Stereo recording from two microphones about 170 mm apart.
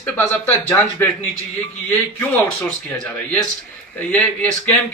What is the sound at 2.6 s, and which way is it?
A man's voice, 5° left (ahead or behind).